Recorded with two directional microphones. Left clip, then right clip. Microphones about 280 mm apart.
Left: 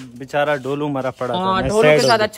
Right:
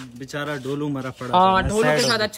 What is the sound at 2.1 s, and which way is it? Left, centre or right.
Speech, centre.